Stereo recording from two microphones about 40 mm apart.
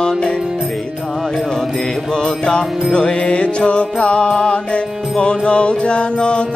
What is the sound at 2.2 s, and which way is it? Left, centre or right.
Music, left.